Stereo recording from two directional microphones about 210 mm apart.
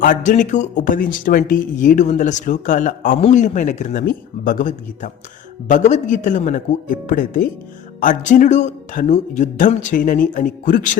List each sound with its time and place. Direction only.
0.0 s speech: 40° left (ahead or behind)